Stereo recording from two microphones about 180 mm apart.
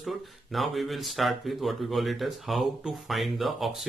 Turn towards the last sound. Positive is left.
turn(degrees=0)  # may be behind; listen again after turning